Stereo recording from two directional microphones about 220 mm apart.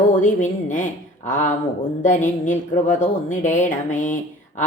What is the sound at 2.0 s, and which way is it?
A woman's voice, 35° left (ahead or behind).